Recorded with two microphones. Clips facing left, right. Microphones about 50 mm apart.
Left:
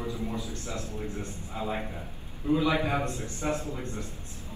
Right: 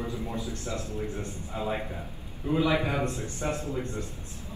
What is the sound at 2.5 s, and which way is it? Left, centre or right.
Speech, right.